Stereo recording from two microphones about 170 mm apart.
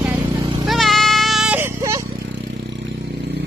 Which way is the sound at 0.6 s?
Centre (ahead or behind).